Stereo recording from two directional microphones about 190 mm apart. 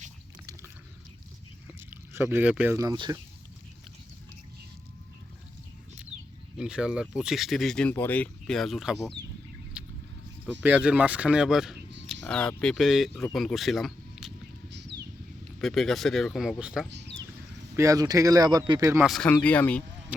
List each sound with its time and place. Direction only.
1.9 s speech: 10° right (ahead or behind)
6.6 s speech: 5° right (ahead or behind)
9.7 s vehicle: 5° right (ahead or behind)
10.4 s speech: 5° right (ahead or behind)
14.7 s a sound: 65° right (ahead or behind)
15.6 s speech: centre (ahead or behind)
16.9 s a sound: 65° right (ahead or behind)
17.7 s speech: 15° right (ahead or behind)
19.0 s speech: centre (ahead or behind)